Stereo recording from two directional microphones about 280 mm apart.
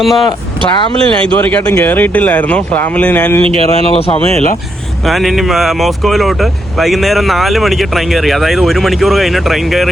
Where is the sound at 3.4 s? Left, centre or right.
Right.